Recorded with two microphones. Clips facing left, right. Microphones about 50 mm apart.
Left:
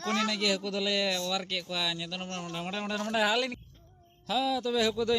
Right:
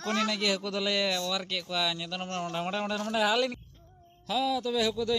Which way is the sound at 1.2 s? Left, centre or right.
Centre.